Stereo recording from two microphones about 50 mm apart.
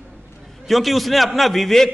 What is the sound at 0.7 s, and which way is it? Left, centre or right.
A man's voice, centre.